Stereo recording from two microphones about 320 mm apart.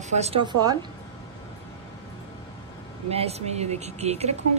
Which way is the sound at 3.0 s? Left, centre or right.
Centre.